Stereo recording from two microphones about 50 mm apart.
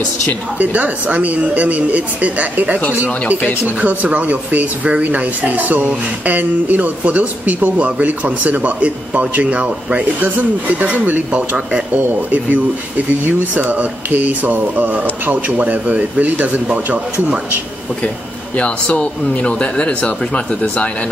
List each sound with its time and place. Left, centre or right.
0.6 s speech: right
18.6 s speech: left